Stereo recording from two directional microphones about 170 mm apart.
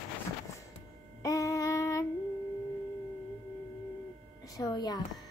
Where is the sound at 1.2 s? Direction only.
20° left (ahead or behind).